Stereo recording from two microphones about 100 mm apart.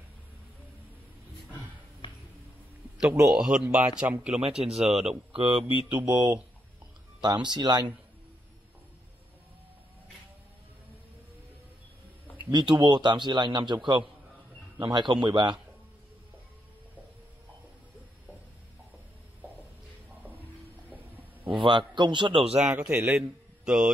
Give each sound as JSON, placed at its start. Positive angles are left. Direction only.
{"t": 3.3, "sound": "a man's voice", "side_deg": -5}
{"t": 4.4, "sound": "speech", "side_deg": -75}
{"t": 5.3, "sound": "speech", "side_deg": -60}
{"t": 5.6, "sound": "a man's voice", "side_deg": -10}
{"t": 6.0, "sound": "a man's voice", "side_deg": -45}
{"t": 7.4, "sound": "a man's voice", "side_deg": -45}
{"t": 12.4, "sound": "a man's voice", "side_deg": -40}
{"t": 21.5, "sound": "a man's voice", "side_deg": -50}
{"t": 22.7, "sound": "a man's voice", "side_deg": -15}